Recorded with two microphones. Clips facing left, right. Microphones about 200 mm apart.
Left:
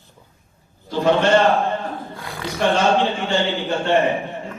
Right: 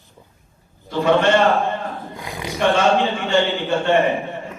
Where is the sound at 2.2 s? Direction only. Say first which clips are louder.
Right 1 dB; 15° right (ahead or behind).